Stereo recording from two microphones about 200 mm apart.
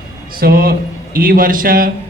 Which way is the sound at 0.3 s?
50° right (ahead or behind).